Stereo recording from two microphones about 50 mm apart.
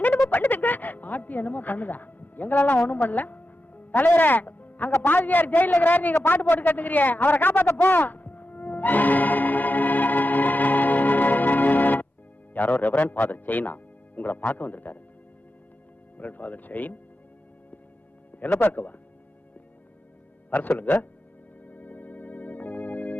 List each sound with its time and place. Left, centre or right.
0.3 s a man's voice: left
7.7 s music: left
12.5 s a man's voice: left
16.1 s a man's voice: left
18.6 s a man's voice: left
20.7 s a man's voice: left
21.7 s organ: left